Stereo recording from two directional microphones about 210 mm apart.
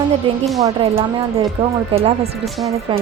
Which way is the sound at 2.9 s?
25° right (ahead or behind).